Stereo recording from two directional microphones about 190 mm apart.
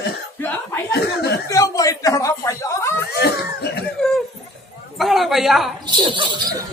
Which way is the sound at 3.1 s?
60° left (ahead or behind).